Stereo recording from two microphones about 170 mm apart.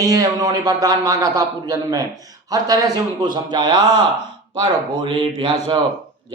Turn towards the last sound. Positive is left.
turn(degrees=-30)  # may be behind; listen again after turning